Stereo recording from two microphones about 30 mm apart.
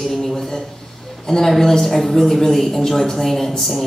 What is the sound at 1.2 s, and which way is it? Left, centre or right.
A man's voice, centre.